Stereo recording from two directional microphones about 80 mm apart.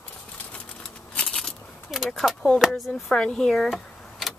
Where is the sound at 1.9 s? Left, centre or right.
Centre.